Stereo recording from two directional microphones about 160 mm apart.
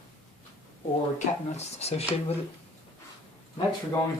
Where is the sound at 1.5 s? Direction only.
40° left (ahead or behind).